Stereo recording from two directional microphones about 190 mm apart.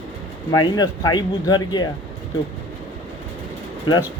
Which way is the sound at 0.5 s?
20° left (ahead or behind).